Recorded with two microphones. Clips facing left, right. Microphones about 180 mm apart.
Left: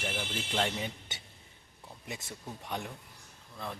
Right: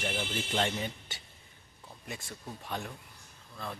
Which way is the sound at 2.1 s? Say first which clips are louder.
Even; 20° left (ahead or behind).